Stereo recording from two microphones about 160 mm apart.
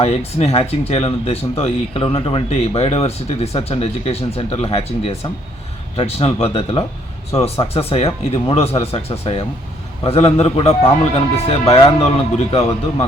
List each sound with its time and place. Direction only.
0.0 s speech: 40° left (ahead or behind)